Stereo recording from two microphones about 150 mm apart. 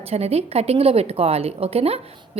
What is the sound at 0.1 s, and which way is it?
A woman's voice, 45° right (ahead or behind).